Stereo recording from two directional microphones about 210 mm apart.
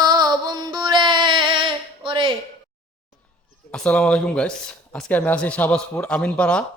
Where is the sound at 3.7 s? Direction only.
5° left (ahead or behind).